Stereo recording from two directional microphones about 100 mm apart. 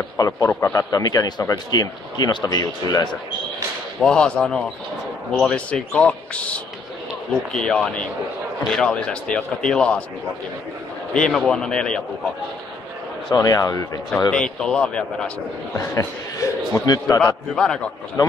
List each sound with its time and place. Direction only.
0.5 s a man's voice: 20° left (ahead or behind)
0.7 s speech: 40° left (ahead or behind)
4.0 s speech: 5° left (ahead or behind)
11.1 s speech: 10° left (ahead or behind)
13.3 s speech: 40° left (ahead or behind)
14.3 s speech: 10° left (ahead or behind)
15.7 s speech: 30° left (ahead or behind)
17.2 s speech: 5° left (ahead or behind)